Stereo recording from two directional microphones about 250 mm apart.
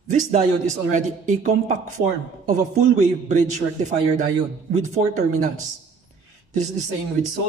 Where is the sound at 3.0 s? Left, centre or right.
Right.